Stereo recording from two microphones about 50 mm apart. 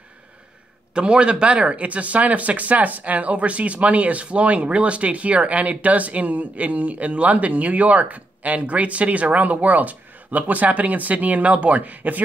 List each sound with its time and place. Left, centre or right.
0.9 s speech: centre